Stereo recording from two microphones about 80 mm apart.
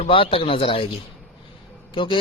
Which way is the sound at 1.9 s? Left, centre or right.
Left.